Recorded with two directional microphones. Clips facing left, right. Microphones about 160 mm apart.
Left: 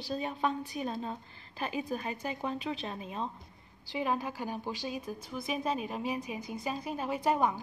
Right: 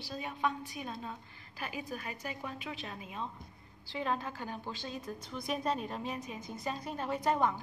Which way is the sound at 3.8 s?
15° left (ahead or behind).